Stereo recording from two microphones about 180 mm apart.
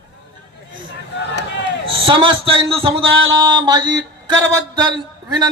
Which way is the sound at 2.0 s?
30° right (ahead or behind).